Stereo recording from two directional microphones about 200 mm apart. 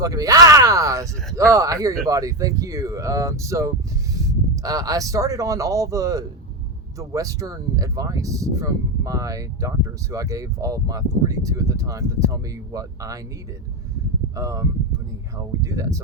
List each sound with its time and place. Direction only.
0.0 s speech: 15° right (ahead or behind)
14.3 s speech: 15° right (ahead or behind)